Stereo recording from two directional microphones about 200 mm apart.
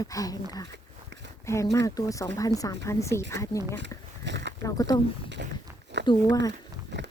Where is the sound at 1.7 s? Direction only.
15° left (ahead or behind).